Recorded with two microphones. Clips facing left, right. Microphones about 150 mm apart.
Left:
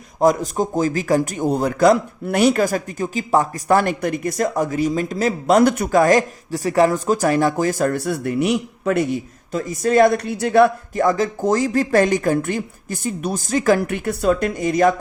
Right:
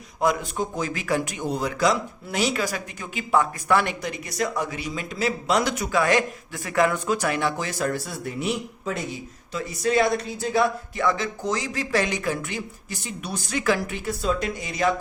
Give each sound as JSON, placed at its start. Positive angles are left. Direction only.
{"t": 0.2, "sound": "a man's voice", "side_deg": 40}
{"t": 13.8, "sound": "speech", "side_deg": 60}